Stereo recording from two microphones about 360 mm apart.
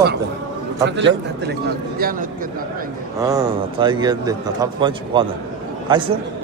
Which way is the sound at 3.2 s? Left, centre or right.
Centre.